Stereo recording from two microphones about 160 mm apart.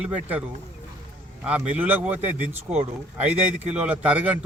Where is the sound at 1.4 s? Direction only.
5° right (ahead or behind).